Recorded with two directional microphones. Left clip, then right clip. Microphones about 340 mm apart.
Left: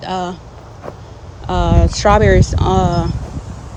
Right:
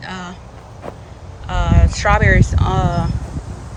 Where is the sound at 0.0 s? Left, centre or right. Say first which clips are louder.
Left 8 dB; centre.